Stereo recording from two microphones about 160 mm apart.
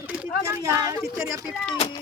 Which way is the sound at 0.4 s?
20° right (ahead or behind).